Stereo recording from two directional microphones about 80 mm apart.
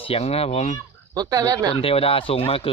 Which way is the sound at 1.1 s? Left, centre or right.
Right.